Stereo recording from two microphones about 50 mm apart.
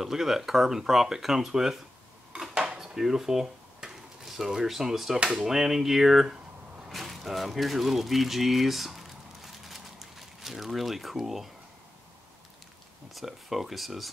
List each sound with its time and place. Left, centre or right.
0.0 s speech: centre
2.5 s cutlery: centre
2.8 s a sound: centre
5.2 s speech: centre
6.9 s a sound: centre
13.1 s speech: centre